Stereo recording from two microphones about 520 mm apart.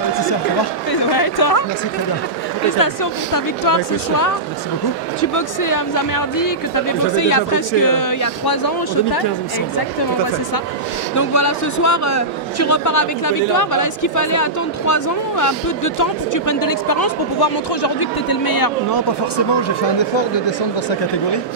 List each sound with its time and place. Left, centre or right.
1.1 s a man's voice: left
2.8 s a man's voice: left
11.1 s a man's voice: left
20.0 s speech: left